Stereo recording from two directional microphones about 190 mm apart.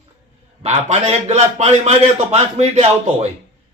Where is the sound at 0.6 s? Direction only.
35° right (ahead or behind).